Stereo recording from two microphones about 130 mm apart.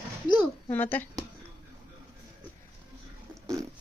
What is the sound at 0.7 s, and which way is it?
Speech, 15° left (ahead or behind).